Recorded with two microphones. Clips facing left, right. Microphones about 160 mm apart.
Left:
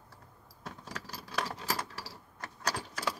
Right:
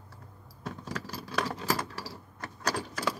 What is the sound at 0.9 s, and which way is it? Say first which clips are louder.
Keys jangling: right 4 dB; 75° right (ahead or behind).